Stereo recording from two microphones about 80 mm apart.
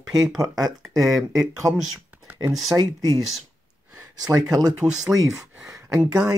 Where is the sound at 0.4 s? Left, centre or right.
Right.